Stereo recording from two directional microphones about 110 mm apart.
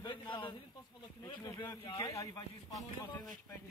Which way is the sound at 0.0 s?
45° left (ahead or behind).